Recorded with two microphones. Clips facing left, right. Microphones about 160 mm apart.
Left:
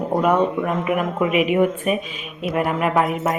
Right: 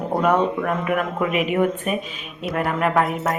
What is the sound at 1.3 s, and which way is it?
Speech, 40° right (ahead or behind).